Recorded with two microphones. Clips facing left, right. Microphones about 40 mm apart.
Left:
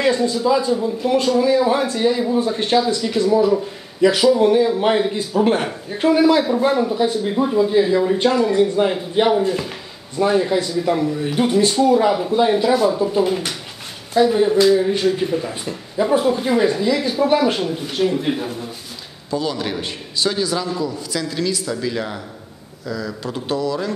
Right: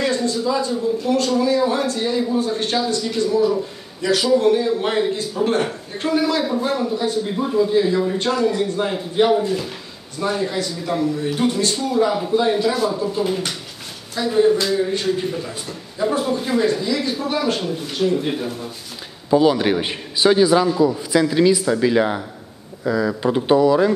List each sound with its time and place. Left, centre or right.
0.0 s speech: centre
19.3 s a man's voice: right